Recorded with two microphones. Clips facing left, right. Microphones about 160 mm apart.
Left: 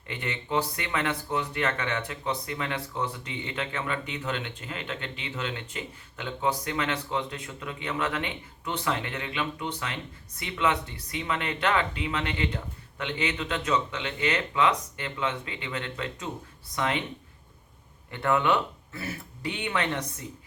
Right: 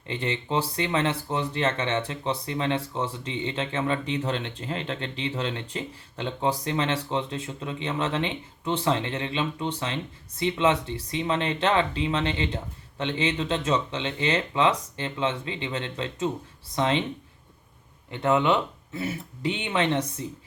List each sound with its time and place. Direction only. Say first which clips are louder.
0.1 s speech: right 2 dB; 30° right (ahead or behind)
18.1 s speech: right 2 dB; 20° right (ahead or behind)